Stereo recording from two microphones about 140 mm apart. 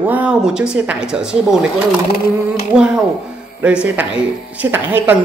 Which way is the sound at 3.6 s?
10° right (ahead or behind).